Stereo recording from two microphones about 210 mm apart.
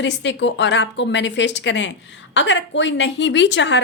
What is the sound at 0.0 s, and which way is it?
A woman's voice, 60° left (ahead or behind).